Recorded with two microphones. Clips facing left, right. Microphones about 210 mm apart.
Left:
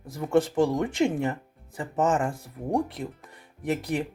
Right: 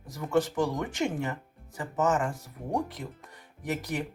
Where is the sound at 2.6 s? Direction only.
Centre (ahead or behind).